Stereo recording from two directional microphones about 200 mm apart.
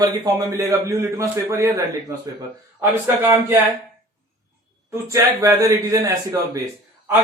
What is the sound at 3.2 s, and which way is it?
Speech, 20° right (ahead or behind).